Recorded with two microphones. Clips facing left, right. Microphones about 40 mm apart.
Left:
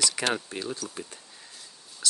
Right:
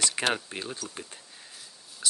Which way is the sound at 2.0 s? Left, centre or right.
Centre.